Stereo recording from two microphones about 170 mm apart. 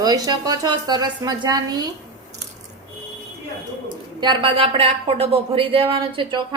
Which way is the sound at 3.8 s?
25° right (ahead or behind).